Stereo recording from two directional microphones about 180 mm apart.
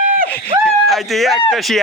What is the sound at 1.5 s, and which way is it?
Speech, centre (ahead or behind).